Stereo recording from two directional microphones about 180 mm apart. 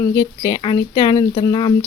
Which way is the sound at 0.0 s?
20° left (ahead or behind).